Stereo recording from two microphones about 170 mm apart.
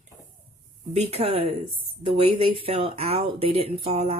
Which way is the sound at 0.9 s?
35° right (ahead or behind).